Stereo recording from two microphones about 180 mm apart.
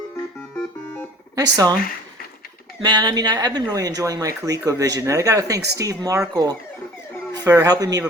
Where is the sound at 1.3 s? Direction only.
20° right (ahead or behind).